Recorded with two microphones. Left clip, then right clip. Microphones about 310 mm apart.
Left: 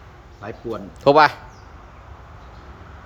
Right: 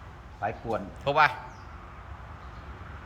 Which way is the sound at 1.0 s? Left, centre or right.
Centre.